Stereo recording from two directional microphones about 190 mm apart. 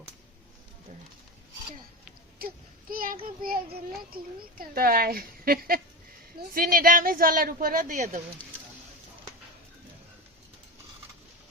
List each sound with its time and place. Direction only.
2.4 s a sound: 50° right (ahead or behind)
2.9 s child singing: 50° right (ahead or behind)
3.2 s a child's voice: 50° right (ahead or behind)